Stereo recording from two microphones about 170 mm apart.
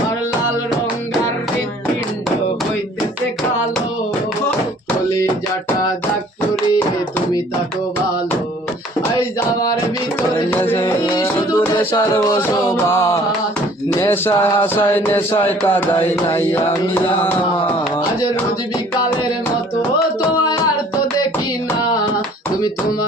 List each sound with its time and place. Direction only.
9.1 s a sound: 20° left (ahead or behind)
10.6 s music: 15° left (ahead or behind)
14.0 s speech: 15° left (ahead or behind)